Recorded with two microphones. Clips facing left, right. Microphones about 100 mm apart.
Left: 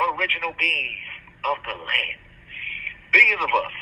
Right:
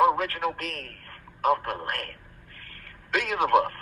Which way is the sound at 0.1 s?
25° right (ahead or behind).